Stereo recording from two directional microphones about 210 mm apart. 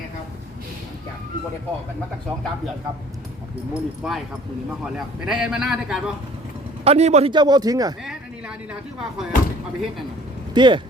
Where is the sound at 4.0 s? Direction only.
Centre (ahead or behind).